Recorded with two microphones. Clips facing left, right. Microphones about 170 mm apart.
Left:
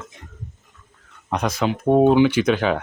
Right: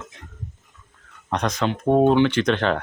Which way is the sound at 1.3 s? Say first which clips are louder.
Left 1 dB; 5° left (ahead or behind).